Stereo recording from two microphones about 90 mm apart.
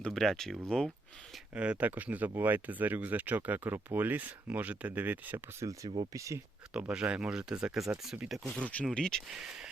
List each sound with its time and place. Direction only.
0.1 s speech: 5° left (ahead or behind)
1.5 s speech: 15° right (ahead or behind)
6.1 s speech: 35° right (ahead or behind)
6.7 s speech: 10° right (ahead or behind)
8.5 s speech: 10° left (ahead or behind)
9.3 s speech: 5° right (ahead or behind)